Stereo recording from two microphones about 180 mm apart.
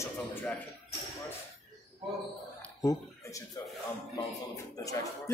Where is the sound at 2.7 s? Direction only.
20° left (ahead or behind).